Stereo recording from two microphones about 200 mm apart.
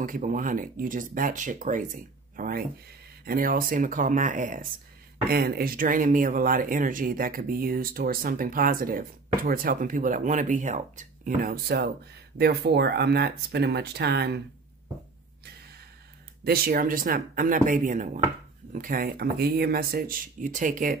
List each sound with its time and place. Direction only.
0.0 s speech: 40° right (ahead or behind)
16.4 s speech: 50° right (ahead or behind)